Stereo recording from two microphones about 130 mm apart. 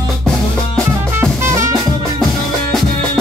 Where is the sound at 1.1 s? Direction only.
20° right (ahead or behind).